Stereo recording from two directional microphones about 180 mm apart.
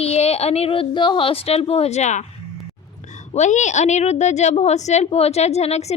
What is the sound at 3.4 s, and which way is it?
A woman's voice, 40° left (ahead or behind).